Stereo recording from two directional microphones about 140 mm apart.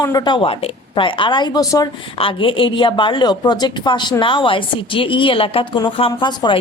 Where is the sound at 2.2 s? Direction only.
40° left (ahead or behind).